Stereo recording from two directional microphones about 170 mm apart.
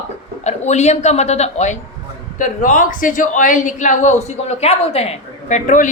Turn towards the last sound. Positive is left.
turn(degrees=50)  # may be behind; listen again after turning